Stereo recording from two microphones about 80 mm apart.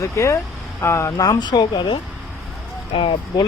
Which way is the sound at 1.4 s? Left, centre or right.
Left.